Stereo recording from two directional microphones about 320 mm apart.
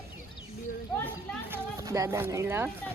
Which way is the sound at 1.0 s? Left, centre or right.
Centre.